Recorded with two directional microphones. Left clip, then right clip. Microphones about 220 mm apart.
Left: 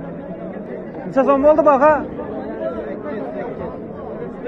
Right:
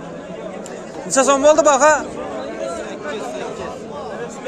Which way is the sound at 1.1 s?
30° right (ahead or behind).